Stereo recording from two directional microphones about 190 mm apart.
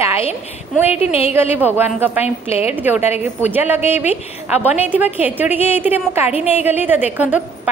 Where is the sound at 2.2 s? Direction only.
35° left (ahead or behind).